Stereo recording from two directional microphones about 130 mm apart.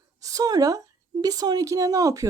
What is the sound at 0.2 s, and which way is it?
Speech, 25° right (ahead or behind).